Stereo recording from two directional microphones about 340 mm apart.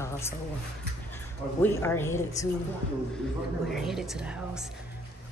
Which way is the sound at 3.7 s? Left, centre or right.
Centre.